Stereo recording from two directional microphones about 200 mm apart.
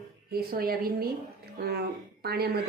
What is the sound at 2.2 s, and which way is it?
Speech, 50° right (ahead or behind).